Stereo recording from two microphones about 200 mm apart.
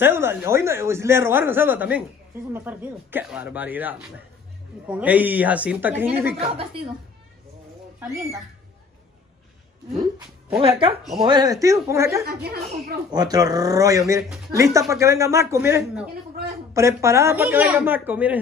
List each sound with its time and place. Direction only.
0.0 s a man's voice: 10° right (ahead or behind)
6.5 s speech: 25° right (ahead or behind)
10.6 s a man's voice: 25° right (ahead or behind)
12.3 s speech: 50° right (ahead or behind)
13.1 s a man's voice: 20° right (ahead or behind)